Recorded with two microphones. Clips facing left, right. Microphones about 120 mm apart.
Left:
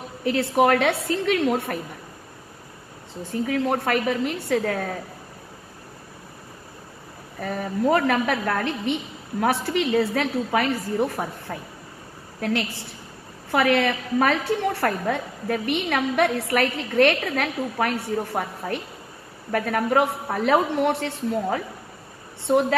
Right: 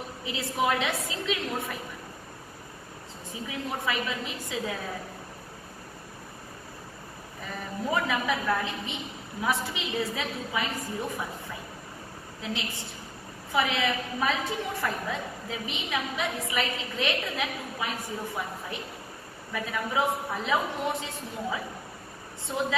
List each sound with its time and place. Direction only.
0.2 s a woman's voice: 65° left (ahead or behind)
3.3 s a woman's voice: 65° left (ahead or behind)
7.3 s a woman's voice: 65° left (ahead or behind)
12.4 s a woman's voice: 65° left (ahead or behind)
14.7 s a woman's voice: 75° left (ahead or behind)